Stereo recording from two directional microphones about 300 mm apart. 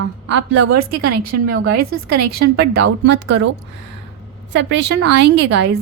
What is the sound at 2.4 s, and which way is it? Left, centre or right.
A woman's voice, right.